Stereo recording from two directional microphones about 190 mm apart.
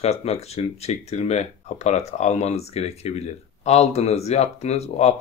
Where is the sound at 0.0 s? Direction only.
35° left (ahead or behind).